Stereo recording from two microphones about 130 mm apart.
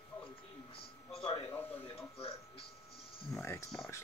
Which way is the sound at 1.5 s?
15° left (ahead or behind).